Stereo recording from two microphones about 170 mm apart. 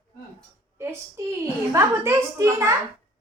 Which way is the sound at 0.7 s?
15° right (ahead or behind).